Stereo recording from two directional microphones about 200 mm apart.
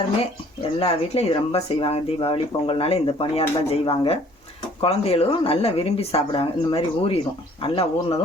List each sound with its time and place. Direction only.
0.8 s speech: 30° left (ahead or behind)